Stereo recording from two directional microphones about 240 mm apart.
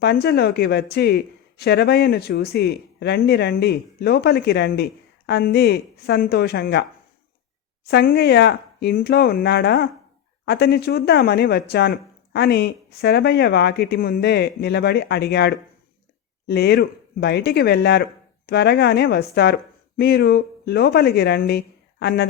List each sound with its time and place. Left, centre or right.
0.0 s speech: left
7.9 s speech: left